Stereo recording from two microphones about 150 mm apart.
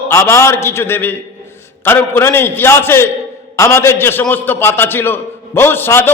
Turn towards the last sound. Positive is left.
turn(degrees=15)  # may be behind; listen again after turning